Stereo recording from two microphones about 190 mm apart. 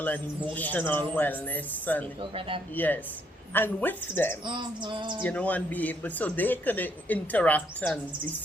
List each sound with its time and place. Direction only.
0.5 s speech: 10° left (ahead or behind)
4.4 s a sound: 25° right (ahead or behind)
5.2 s speech: 5° left (ahead or behind)